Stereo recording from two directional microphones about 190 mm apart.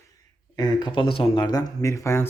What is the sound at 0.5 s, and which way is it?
Speech, 20° left (ahead or behind).